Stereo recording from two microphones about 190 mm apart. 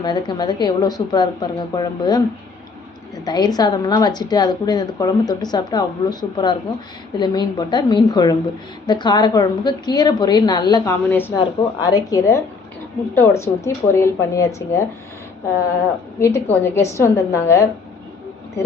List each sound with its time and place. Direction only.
0.0 s a woman's voice: 25° left (ahead or behind)
3.2 s a woman's voice: 20° left (ahead or behind)
16.2 s speech: 15° left (ahead or behind)